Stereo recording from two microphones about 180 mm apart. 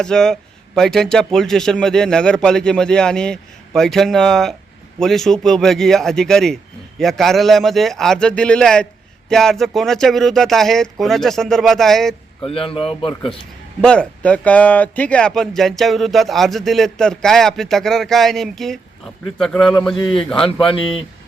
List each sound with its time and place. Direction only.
0.0 s speech: 5° left (ahead or behind)
12.4 s speech: 30° left (ahead or behind)
13.8 s speech: 5° left (ahead or behind)
20.0 s speech: 30° left (ahead or behind)